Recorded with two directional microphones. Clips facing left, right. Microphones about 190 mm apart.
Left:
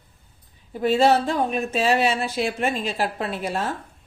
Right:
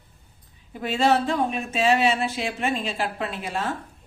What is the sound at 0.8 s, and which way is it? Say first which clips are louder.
Speech: left 3 dB; 35° left (ahead or behind).